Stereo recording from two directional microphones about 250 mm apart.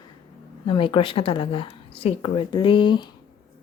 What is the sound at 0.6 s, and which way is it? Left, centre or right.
A woman's voice, left.